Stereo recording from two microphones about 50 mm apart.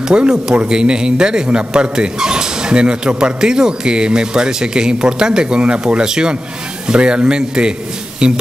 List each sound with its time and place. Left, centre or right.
0.1 s a man's voice: centre